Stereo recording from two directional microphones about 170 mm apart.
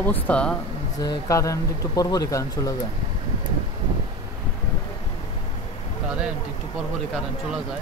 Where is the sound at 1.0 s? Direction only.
20° left (ahead or behind).